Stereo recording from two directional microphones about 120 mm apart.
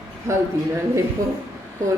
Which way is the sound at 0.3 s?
25° right (ahead or behind).